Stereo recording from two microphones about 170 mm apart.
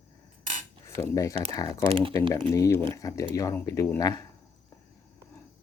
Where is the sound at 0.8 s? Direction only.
15° left (ahead or behind).